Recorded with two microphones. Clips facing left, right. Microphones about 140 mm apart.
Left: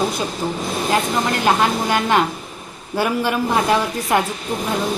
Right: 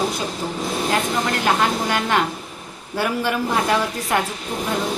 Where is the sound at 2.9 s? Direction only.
20° left (ahead or behind).